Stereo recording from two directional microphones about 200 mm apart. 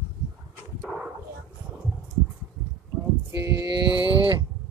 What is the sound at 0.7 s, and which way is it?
Dog, 5° right (ahead or behind).